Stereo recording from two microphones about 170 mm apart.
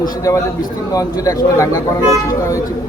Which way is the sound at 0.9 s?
20° left (ahead or behind).